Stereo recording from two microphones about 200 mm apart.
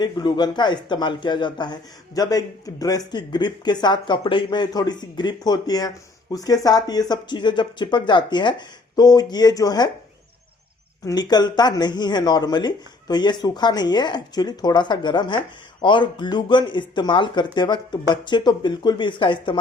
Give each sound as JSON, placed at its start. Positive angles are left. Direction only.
{"t": 0.0, "sound": "speech", "side_deg": 20}
{"t": 11.0, "sound": "speech", "side_deg": 20}